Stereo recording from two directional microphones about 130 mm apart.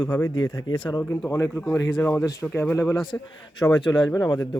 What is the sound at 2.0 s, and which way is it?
Speech, 15° left (ahead or behind).